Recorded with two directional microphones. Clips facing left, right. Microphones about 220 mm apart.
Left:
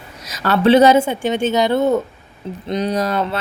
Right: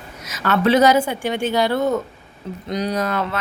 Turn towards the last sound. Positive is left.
turn(degrees=30)  # may be behind; listen again after turning